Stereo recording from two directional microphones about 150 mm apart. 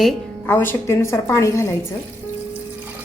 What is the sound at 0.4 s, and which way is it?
A woman's voice, 15° left (ahead or behind).